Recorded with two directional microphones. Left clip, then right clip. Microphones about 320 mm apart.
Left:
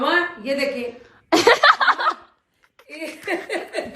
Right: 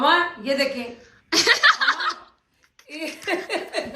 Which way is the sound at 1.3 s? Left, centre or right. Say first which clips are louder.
Left 3 dB; centre.